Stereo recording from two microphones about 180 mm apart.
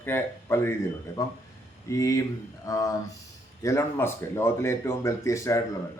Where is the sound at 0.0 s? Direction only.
15° left (ahead or behind).